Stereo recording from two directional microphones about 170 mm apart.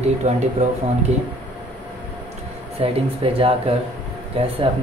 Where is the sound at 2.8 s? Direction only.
35° right (ahead or behind).